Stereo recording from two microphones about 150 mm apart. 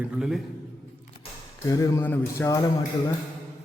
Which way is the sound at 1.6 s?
25° left (ahead or behind).